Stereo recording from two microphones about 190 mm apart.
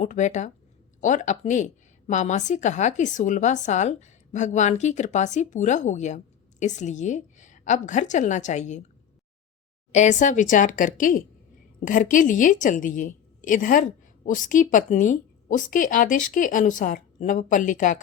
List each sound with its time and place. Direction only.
0.0 s a woman's voice: 40° left (ahead or behind)
9.9 s a woman's voice: 40° left (ahead or behind)